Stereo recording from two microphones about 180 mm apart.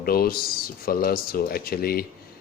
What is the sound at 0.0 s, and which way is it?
Speech, 55° left (ahead or behind).